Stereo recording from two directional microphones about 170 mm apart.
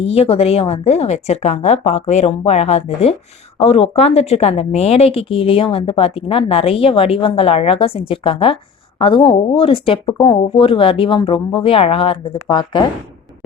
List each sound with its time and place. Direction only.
0.0 s a woman's voice: 35° left (ahead or behind)